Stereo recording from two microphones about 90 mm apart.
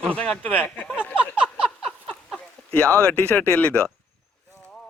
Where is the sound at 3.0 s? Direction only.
10° left (ahead or behind).